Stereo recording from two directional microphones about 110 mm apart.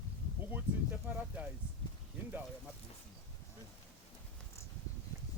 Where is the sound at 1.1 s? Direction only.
15° right (ahead or behind).